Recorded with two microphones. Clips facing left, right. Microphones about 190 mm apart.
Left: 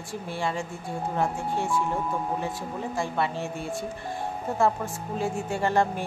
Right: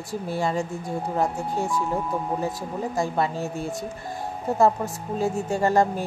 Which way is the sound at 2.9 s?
40° right (ahead or behind).